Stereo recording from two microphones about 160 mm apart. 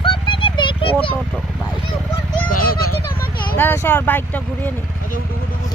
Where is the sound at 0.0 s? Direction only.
30° left (ahead or behind).